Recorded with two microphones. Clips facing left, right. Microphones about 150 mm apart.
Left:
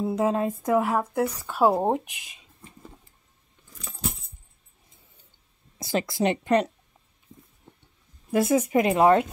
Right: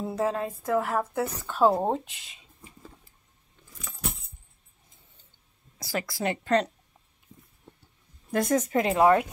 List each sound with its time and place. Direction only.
0.0 s speech: 15° left (ahead or behind)
5.8 s speech: 20° left (ahead or behind)
8.3 s speech: 5° left (ahead or behind); by 9.3 s 25° left (ahead or behind)